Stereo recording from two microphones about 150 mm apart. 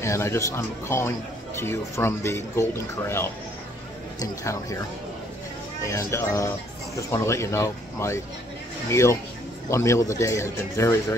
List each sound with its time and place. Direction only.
0.0 s speech: 20° left (ahead or behind)
5.9 s speech: 20° left (ahead or behind)